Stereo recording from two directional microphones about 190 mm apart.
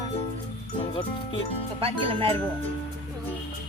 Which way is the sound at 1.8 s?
30° right (ahead or behind).